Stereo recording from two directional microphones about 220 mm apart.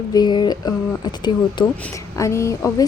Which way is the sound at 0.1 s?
20° left (ahead or behind).